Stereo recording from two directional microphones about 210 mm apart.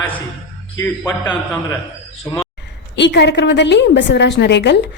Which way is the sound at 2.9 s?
55° left (ahead or behind).